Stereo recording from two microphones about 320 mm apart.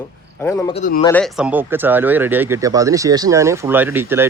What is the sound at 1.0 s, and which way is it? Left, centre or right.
Speech, centre.